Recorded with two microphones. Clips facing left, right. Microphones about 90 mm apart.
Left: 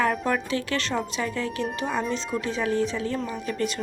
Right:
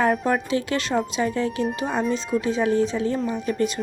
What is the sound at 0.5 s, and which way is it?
Speech, 20° right (ahead or behind).